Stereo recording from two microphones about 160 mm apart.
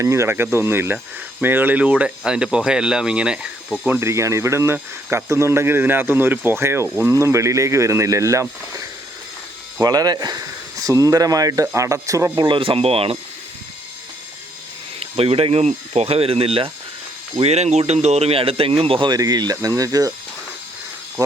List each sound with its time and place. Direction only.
0.0 s speech: 20° right (ahead or behind)
4.0 s speech: 15° right (ahead or behind)
12.5 s speech: 35° right (ahead or behind)
14.9 s speech: 40° right (ahead or behind); by 20.1 s 20° right (ahead or behind)